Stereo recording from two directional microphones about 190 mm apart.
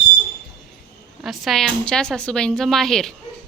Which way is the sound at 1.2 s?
Centre (ahead or behind).